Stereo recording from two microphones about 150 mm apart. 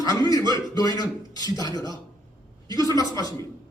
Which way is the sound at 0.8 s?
25° left (ahead or behind).